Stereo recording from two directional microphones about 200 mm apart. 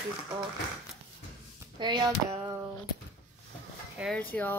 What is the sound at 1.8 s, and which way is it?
Speech, 20° right (ahead or behind).